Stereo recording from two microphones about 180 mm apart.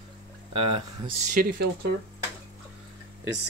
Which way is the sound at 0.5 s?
30° right (ahead or behind).